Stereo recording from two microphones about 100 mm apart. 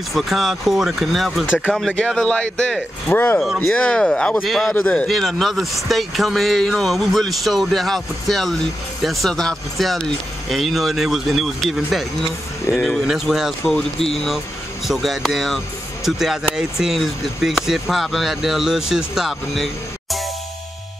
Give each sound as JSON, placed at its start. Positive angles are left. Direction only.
{"t": 0.1, "sound": "speech", "side_deg": 0}
{"t": 1.4, "sound": "speech", "side_deg": 20}
{"t": 1.7, "sound": "speech", "side_deg": 5}
{"t": 3.1, "sound": "speech", "side_deg": 20}
{"t": 4.7, "sound": "speech", "side_deg": 15}
{"t": 5.0, "sound": "speech", "side_deg": 0}